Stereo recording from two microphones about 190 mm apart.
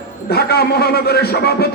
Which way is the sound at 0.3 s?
55° left (ahead or behind).